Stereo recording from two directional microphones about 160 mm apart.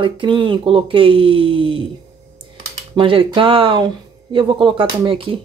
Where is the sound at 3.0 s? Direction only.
35° right (ahead or behind).